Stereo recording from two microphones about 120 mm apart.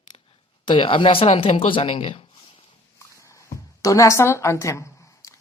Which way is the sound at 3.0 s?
25° left (ahead or behind).